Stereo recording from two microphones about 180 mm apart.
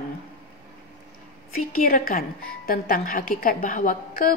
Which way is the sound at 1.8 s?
50° left (ahead or behind).